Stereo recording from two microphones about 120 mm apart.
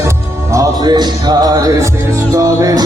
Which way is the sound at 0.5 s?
30° right (ahead or behind).